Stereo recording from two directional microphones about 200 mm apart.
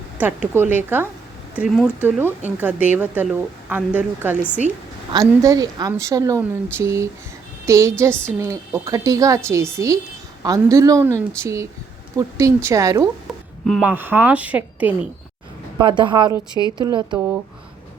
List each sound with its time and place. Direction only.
0.2 s speech: 10° right (ahead or behind)
13.7 s speech: centre (ahead or behind)
15.8 s a woman's voice: 25° right (ahead or behind)